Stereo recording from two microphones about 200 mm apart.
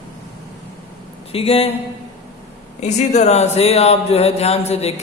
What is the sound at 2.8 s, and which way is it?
Speech, 35° left (ahead or behind).